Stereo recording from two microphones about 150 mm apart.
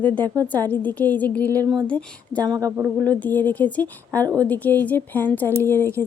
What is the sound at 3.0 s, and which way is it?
A woman's voice, 10° left (ahead or behind).